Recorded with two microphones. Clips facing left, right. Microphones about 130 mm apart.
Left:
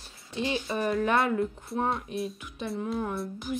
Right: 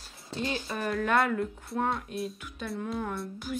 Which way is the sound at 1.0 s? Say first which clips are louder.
Right 1 dB; 20° left (ahead or behind).